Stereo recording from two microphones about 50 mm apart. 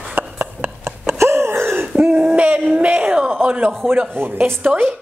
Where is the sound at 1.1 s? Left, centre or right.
Right.